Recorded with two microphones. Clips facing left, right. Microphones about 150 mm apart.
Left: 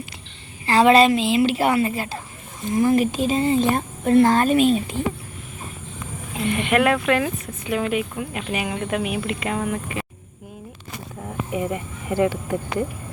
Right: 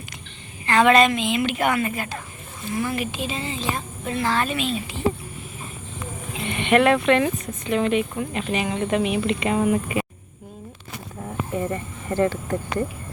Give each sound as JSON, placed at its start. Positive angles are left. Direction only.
{"t": 0.6, "sound": "a woman's voice", "side_deg": 30}
{"t": 2.7, "sound": "a woman's voice", "side_deg": 40}
{"t": 6.4, "sound": "speech", "side_deg": 0}
{"t": 9.6, "sound": "speech", "side_deg": -10}
{"t": 11.2, "sound": "speech", "side_deg": 5}